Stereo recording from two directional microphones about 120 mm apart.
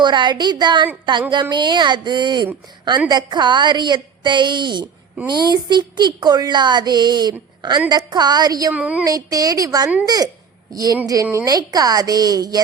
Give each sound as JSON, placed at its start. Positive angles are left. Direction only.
{"t": 0.0, "sound": "a woman's voice", "side_deg": -40}
{"t": 8.7, "sound": "a woman's voice", "side_deg": -10}
{"t": 9.0, "sound": "a woman's voice", "side_deg": -30}